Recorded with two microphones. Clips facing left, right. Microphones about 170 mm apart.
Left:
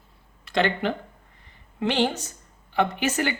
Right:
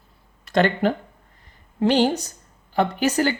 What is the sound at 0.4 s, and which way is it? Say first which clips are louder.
A woman's voice: right 4 dB; 45° right (ahead or behind).